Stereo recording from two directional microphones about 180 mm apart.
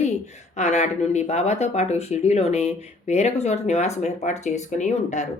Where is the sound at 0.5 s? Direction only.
40° left (ahead or behind).